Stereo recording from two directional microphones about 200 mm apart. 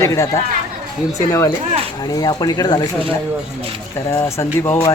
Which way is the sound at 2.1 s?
20° left (ahead or behind).